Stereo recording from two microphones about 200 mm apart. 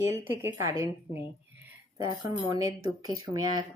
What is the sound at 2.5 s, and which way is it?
Speech, 15° right (ahead or behind).